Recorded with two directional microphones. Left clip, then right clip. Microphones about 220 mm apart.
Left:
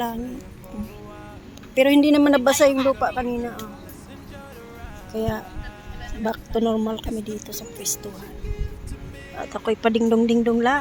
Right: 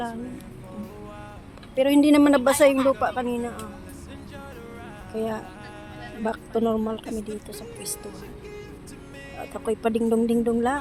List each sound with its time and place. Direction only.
1.7 s a woman's voice: 20° left (ahead or behind)
2.0 s speech: centre (ahead or behind)
5.1 s speech: 10° left (ahead or behind)
7.5 s speech: 10° left (ahead or behind)
9.3 s speech: centre (ahead or behind)